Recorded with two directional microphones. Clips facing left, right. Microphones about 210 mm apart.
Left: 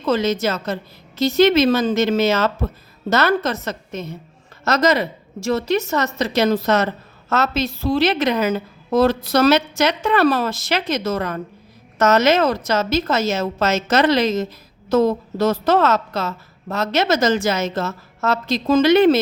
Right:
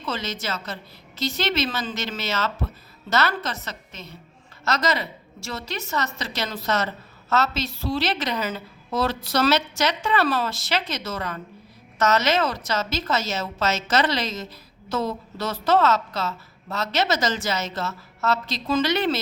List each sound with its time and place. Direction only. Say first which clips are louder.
0.1 s a woman's voice: left 11 dB; 55° left (ahead or behind)